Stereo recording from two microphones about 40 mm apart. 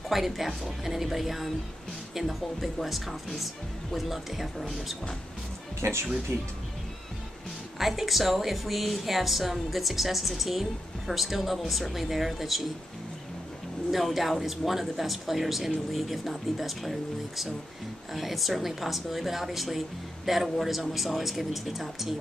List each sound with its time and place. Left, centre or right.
0.1 s a woman's voice: centre
6.3 s speech: right
7.8 s a woman's voice: centre
13.8 s a woman's voice: centre